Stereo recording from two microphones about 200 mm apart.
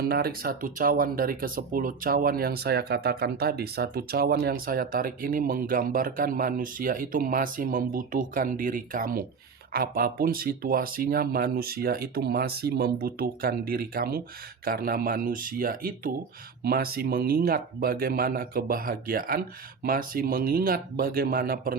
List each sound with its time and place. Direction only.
0.0 s speech: 50° right (ahead or behind)